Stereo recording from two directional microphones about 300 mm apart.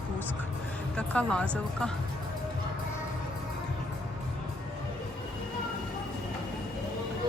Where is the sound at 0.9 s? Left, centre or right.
Centre.